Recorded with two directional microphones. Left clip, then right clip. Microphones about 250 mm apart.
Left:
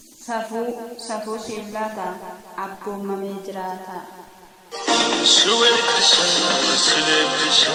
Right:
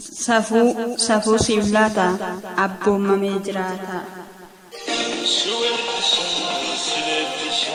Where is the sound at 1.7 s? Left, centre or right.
Right.